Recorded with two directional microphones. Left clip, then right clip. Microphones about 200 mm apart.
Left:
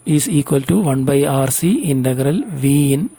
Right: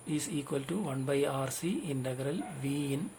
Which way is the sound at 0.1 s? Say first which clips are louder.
Left 18 dB; 55° left (ahead or behind).